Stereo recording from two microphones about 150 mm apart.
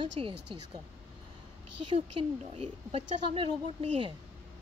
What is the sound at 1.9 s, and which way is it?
A woman's voice, 40° right (ahead or behind).